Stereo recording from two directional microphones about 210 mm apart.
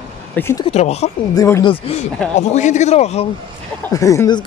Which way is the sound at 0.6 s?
30° left (ahead or behind).